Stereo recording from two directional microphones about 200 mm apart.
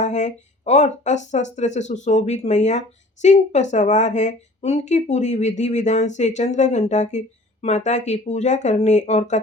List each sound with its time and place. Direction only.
0.0 s speech: 35° left (ahead or behind)